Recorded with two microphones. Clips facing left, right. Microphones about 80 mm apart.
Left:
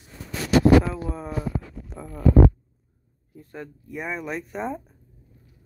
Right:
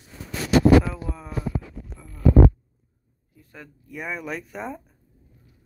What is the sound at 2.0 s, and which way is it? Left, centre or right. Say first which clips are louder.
Heart sounds: left 9 dB; left.